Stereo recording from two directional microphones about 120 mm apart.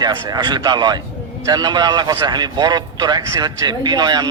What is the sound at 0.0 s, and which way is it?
A man's voice, 35° right (ahead or behind).